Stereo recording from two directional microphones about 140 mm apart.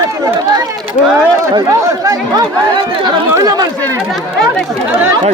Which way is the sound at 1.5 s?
25° right (ahead or behind).